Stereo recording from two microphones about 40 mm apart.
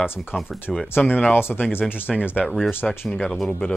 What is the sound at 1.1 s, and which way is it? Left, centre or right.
Speech, left.